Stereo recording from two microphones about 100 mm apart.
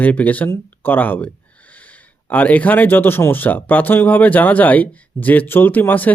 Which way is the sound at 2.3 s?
15° left (ahead or behind).